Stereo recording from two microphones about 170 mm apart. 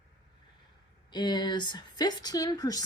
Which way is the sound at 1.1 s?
25° left (ahead or behind).